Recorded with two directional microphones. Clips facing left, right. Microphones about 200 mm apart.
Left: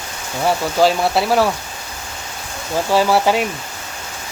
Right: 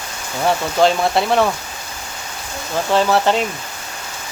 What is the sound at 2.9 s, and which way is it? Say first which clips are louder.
Speech: even; 10° left (ahead or behind).